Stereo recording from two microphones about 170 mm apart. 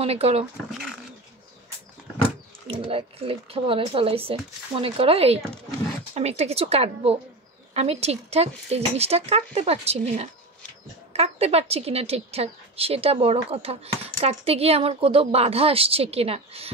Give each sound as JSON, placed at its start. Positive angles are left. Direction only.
{"t": 0.0, "sound": "a woman's voice", "side_deg": -35}
{"t": 0.7, "sound": "speech", "side_deg": 0}
{"t": 2.7, "sound": "a woman's voice", "side_deg": -30}